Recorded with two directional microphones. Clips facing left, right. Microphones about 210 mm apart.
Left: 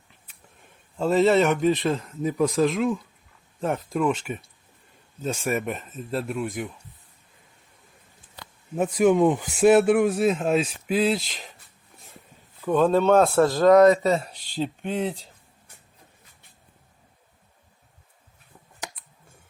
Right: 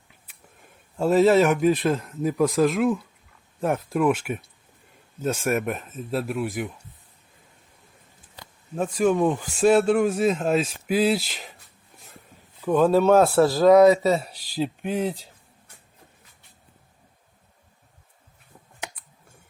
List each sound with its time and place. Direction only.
0.9 s speech: 5° right (ahead or behind)
8.7 s speech: 15° left (ahead or behind)
10.1 s speech: centre (ahead or behind)
12.6 s speech: 10° right (ahead or behind)